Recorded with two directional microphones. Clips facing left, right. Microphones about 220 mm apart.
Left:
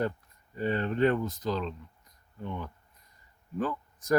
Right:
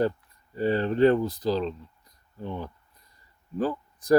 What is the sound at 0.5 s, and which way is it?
Speech, 35° right (ahead or behind).